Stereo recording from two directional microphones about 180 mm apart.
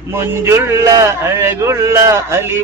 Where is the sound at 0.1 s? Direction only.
15° right (ahead or behind).